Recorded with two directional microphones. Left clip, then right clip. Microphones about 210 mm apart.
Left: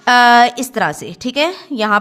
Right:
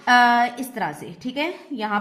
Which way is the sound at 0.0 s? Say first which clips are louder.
Left 7 dB; 40° left (ahead or behind).